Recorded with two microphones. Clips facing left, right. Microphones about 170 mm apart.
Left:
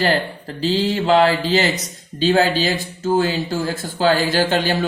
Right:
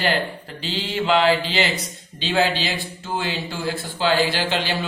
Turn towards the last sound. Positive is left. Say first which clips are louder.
# left 6 dB
turn(degrees=45)  # may be behind; listen again after turning